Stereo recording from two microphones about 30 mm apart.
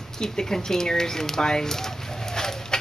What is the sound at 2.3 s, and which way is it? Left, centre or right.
Bird, centre.